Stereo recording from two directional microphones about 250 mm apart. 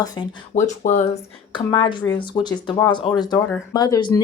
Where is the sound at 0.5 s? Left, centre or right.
Left.